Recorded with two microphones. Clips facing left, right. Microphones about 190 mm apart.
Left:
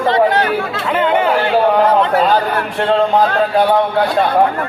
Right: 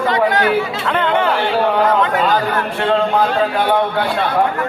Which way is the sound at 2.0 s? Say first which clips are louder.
Left 3 dB; 35° left (ahead or behind).